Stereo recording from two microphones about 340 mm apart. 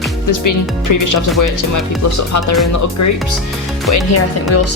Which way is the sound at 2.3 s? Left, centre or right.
Left.